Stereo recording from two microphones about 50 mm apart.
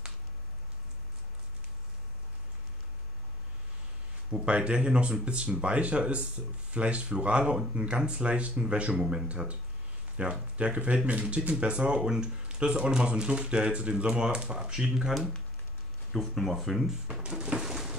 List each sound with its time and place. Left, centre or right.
4.3 s speech: right
9.3 s speech: right
16.1 s speech: centre
17.4 s a sound: centre